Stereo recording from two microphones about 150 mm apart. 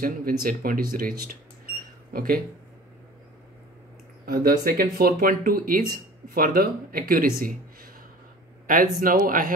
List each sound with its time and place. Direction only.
0.0 s speech: 75° right (ahead or behind)
4.3 s speech: 80° right